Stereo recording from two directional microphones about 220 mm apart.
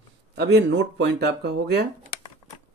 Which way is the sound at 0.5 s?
50° right (ahead or behind).